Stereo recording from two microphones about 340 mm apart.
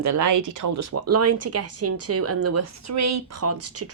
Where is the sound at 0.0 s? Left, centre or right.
Right.